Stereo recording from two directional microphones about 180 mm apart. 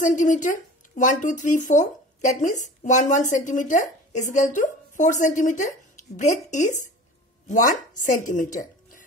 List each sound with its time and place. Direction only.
0.0 s speech: 45° left (ahead or behind)